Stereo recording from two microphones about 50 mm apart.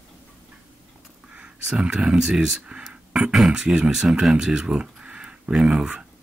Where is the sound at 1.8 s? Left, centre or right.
Centre.